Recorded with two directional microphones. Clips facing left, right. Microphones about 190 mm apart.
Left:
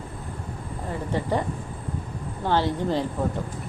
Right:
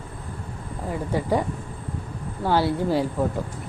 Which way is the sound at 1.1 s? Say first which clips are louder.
Right 2 dB; 10° right (ahead or behind).